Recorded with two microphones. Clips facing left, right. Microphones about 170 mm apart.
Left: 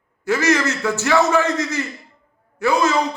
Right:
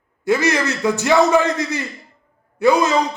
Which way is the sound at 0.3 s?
15° right (ahead or behind).